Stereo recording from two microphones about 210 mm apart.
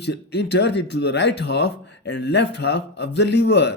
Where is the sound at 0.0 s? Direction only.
55° left (ahead or behind).